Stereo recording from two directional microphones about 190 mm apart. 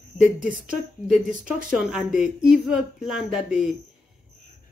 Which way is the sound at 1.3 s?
45° right (ahead or behind).